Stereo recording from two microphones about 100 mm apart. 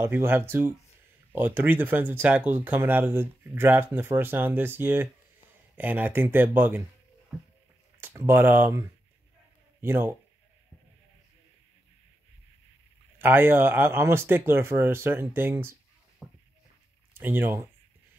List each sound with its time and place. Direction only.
0.0 s speech: 25° right (ahead or behind)
8.0 s speech: 25° right (ahead or behind)
9.8 s speech: 25° right (ahead or behind)
13.2 s speech: 20° right (ahead or behind)
16.2 s a sound: centre (ahead or behind)
17.1 s speech: 20° right (ahead or behind)